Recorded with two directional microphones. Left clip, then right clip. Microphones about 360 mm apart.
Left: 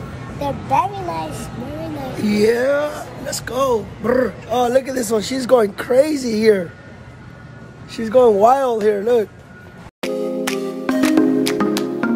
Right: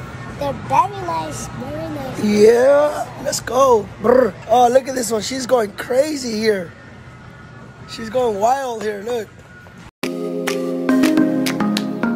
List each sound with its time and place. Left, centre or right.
0.4 s speech: centre
2.1 s speech: centre
7.9 s speech: centre
9.9 s music: centre